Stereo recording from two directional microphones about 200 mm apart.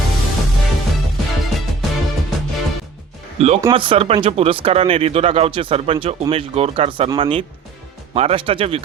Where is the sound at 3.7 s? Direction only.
25° right (ahead or behind).